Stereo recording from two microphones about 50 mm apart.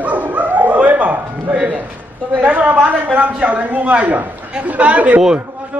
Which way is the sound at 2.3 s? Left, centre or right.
Right.